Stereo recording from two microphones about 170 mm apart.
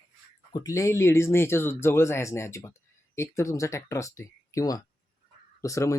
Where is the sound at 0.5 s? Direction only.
20° left (ahead or behind).